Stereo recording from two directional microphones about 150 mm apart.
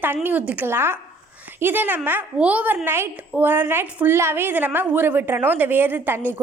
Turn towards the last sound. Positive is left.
turn(degrees=-15)  # may be behind; listen again after turning